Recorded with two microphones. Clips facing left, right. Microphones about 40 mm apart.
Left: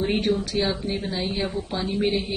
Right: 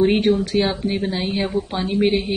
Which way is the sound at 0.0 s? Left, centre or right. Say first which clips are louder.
Right 7 dB; right.